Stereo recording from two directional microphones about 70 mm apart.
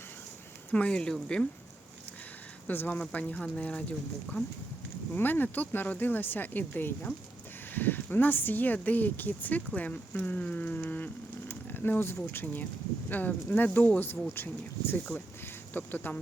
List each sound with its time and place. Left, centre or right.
0.7 s speech: centre
2.6 s speech: left